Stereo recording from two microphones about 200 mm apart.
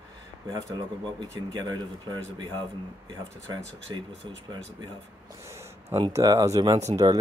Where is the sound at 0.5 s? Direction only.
20° right (ahead or behind).